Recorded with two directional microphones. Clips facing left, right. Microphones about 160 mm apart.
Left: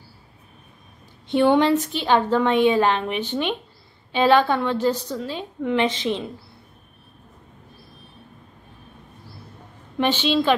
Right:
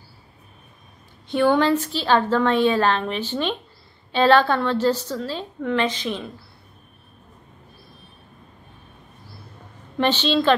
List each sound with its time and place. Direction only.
1.2 s a woman's voice: 25° left (ahead or behind)
9.9 s a woman's voice: 10° left (ahead or behind)